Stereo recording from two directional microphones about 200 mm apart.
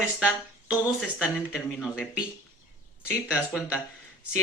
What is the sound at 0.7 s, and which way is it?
Speech, centre (ahead or behind).